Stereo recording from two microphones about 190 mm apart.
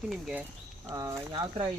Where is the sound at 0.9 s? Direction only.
15° right (ahead or behind).